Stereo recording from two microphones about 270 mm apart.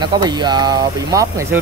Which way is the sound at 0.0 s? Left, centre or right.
Centre.